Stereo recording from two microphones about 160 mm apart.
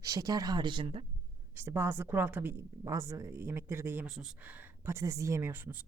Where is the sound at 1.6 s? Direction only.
15° right (ahead or behind).